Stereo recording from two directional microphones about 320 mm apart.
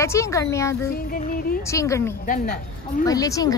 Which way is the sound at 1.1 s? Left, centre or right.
Left.